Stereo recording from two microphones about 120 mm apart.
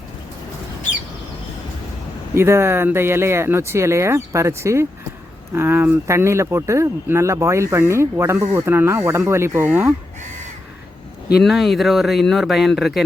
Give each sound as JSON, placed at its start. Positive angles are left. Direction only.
{"t": 2.3, "sound": "speech", "side_deg": -20}
{"t": 11.4, "sound": "speech", "side_deg": 0}